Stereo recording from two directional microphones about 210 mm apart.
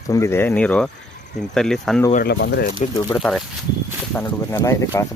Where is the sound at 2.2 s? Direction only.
55° left (ahead or behind).